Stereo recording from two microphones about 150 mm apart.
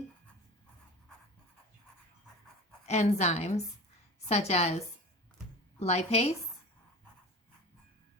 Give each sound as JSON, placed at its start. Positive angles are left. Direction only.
{"t": 2.8, "sound": "a woman's voice", "side_deg": 50}
{"t": 5.8, "sound": "a woman's voice", "side_deg": 45}